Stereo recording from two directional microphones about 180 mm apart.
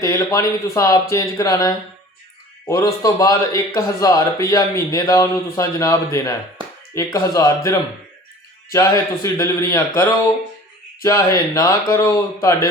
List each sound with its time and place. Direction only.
0.0 s speech: 15° left (ahead or behind)